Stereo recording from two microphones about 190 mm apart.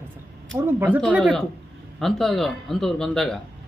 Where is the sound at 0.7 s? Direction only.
10° right (ahead or behind).